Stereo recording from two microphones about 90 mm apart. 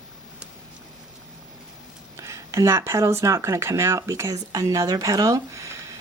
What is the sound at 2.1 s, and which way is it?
Speech, 35° right (ahead or behind).